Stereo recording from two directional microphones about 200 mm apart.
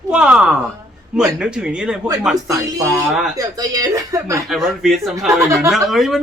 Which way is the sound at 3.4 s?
15° right (ahead or behind).